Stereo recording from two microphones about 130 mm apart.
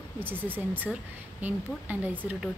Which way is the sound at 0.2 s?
15° right (ahead or behind).